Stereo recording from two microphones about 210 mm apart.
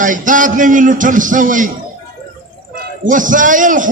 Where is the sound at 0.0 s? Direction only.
40° right (ahead or behind).